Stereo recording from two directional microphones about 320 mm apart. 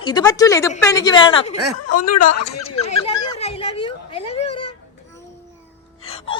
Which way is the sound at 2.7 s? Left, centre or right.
Centre.